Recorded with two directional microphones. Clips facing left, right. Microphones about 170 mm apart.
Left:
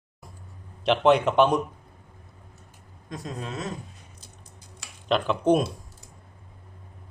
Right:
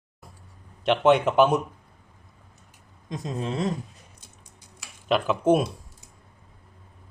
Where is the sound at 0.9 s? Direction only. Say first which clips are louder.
Even; centre (ahead or behind).